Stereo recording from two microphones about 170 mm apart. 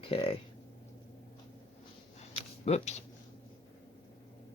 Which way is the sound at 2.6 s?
40° left (ahead or behind).